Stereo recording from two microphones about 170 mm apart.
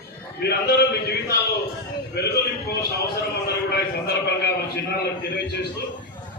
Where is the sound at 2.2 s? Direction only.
70° left (ahead or behind).